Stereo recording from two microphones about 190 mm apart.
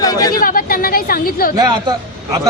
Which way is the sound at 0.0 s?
20° left (ahead or behind).